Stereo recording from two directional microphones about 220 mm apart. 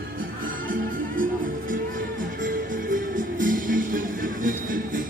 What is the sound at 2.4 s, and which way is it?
Music, 40° right (ahead or behind).